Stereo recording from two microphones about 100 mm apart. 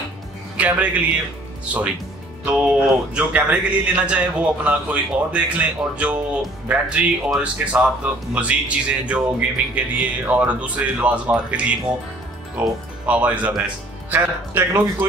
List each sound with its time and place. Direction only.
0.6 s speech: 15° right (ahead or behind)
2.4 s speech: 10° right (ahead or behind)